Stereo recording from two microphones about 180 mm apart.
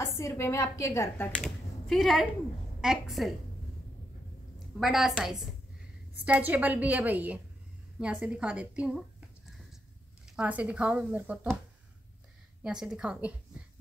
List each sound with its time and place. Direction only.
0.0 s a woman's voice: 15° left (ahead or behind)
1.3 s a woman's voice: centre (ahead or behind)
4.7 s a woman's voice: centre (ahead or behind)
10.3 s a woman's voice: 10° right (ahead or behind)
12.6 s a woman's voice: 5° right (ahead or behind)